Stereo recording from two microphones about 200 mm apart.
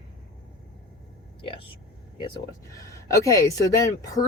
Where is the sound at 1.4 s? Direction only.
25° left (ahead or behind).